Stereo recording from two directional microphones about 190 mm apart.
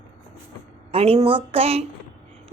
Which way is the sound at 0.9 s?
30° right (ahead or behind).